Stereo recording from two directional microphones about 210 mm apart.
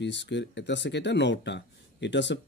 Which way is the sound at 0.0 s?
55° left (ahead or behind).